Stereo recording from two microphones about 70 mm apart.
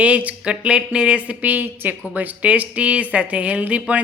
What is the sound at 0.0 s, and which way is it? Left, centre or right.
Speech, centre.